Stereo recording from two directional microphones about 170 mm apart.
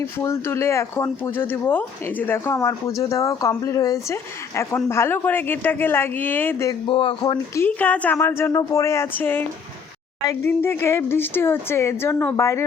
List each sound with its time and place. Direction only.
0.2 s a woman's voice: 15° left (ahead or behind)
6.8 s speech: 30° left (ahead or behind)
7.5 s a woman's voice: 10° left (ahead or behind)